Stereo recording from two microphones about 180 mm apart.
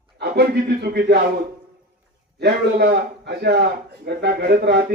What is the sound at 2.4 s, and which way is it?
A man's voice, 65° right (ahead or behind).